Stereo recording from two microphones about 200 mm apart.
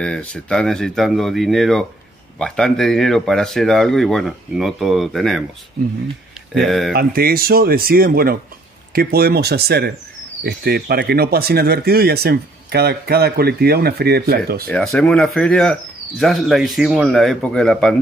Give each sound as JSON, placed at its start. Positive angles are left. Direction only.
{"t": 0.0, "sound": "speech", "side_deg": 5}
{"t": 5.8, "sound": "speech", "side_deg": -50}
{"t": 6.5, "sound": "speech", "side_deg": 0}
{"t": 6.9, "sound": "speech", "side_deg": -50}
{"t": 14.7, "sound": "speech", "side_deg": 5}